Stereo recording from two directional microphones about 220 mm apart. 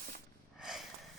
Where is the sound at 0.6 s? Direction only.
Centre (ahead or behind).